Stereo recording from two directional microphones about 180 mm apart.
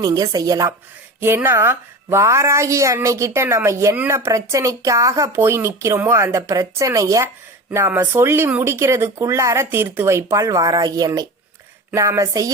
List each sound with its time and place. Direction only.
0.0 s a woman's voice: 20° right (ahead or behind)